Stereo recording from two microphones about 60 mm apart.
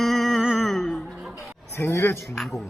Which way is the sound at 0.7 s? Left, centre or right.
Centre.